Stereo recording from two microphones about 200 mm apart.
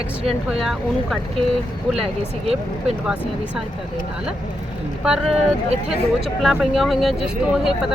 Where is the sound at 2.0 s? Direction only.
30° right (ahead or behind).